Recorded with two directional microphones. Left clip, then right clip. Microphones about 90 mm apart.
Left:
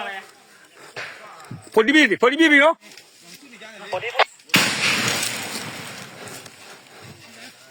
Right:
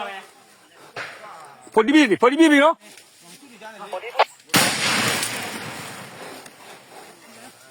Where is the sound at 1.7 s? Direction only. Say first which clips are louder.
Left 1 dB; 20° left (ahead or behind).